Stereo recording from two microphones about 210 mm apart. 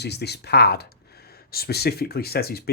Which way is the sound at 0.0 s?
50° left (ahead or behind).